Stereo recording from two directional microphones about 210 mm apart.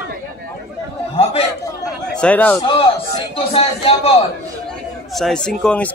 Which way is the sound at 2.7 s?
25° left (ahead or behind).